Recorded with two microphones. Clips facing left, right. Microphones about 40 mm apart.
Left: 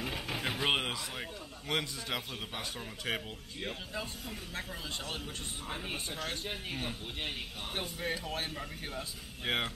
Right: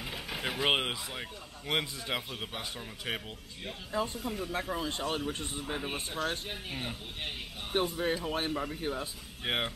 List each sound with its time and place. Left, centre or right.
0.0 s vehicle: centre
1.7 s a man's voice: centre
5.7 s a man's voice: centre
7.7 s a man's voice: right
9.4 s a man's voice: centre